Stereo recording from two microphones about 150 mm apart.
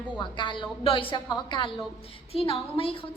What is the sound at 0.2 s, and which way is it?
A woman's voice, 30° left (ahead or behind).